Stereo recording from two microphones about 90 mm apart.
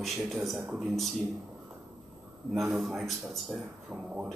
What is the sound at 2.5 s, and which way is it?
A man's voice, centre (ahead or behind).